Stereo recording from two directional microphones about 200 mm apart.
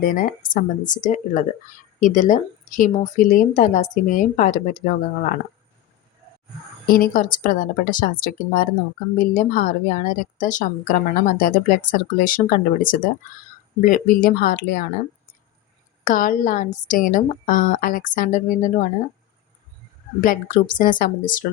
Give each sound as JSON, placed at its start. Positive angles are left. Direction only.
{"t": 0.0, "sound": "speech", "side_deg": 45}
{"t": 6.9, "sound": "a woman's voice", "side_deg": 45}
{"t": 16.0, "sound": "speech", "side_deg": 40}
{"t": 20.2, "sound": "a woman's voice", "side_deg": 45}